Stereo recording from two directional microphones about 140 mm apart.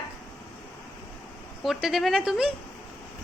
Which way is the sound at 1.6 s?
Centre (ahead or behind).